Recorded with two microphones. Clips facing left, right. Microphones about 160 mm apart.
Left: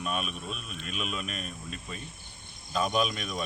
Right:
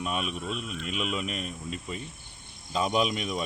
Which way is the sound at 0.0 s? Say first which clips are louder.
Right 2 dB; 20° right (ahead or behind).